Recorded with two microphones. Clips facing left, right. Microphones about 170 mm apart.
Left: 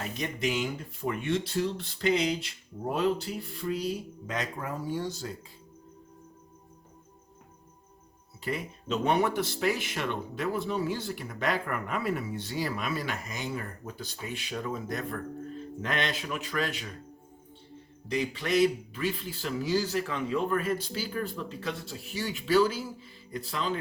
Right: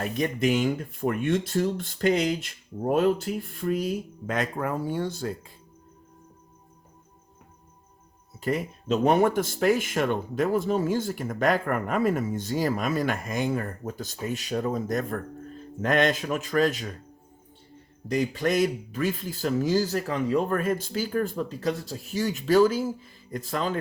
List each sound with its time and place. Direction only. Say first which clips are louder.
0.0 s speech: right 6 dB; 50° right (ahead or behind)
8.4 s speech: right 6 dB; 45° right (ahead or behind)
18.1 s speech: right 4 dB; 45° right (ahead or behind)